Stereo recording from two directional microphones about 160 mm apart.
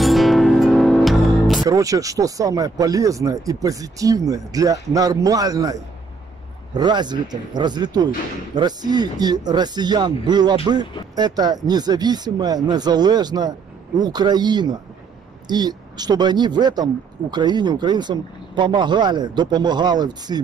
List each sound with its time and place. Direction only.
0.0 s music: centre (ahead or behind)
1.7 s speech: 20° right (ahead or behind)